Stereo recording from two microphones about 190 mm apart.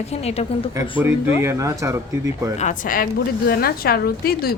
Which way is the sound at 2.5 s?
40° left (ahead or behind).